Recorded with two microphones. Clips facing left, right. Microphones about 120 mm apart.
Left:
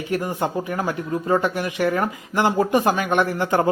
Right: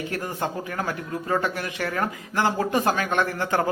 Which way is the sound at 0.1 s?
15° left (ahead or behind).